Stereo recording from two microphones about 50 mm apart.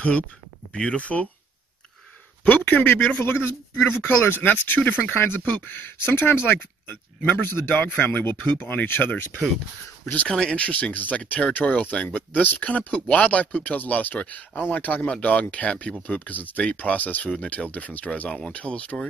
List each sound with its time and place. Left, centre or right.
0.7 s speech: left
2.4 s speech: left
3.3 s a man's voice: left
4.4 s speech: left
5.1 s speech: left
5.4 s speech: left
10.2 s speech: centre
10.6 s speech: left